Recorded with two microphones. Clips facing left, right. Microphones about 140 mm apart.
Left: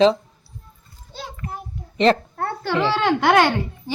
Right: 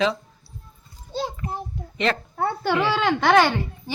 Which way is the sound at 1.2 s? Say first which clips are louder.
Right 5 dB; 30° right (ahead or behind).